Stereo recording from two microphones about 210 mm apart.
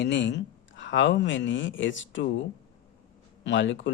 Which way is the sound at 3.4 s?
60° left (ahead or behind).